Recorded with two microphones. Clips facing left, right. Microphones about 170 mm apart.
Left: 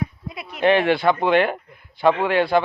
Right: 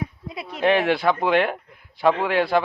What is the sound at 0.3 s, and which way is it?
Speech, 30° right (ahead or behind).